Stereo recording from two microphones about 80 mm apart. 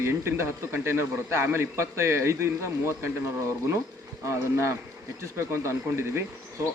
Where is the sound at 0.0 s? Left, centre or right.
Right.